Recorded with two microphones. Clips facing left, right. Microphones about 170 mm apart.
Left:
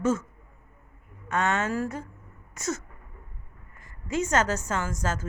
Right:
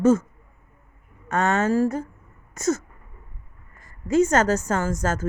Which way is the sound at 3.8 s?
40° right (ahead or behind).